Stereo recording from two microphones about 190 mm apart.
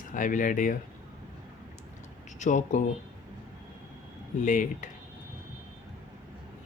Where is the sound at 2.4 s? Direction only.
40° left (ahead or behind).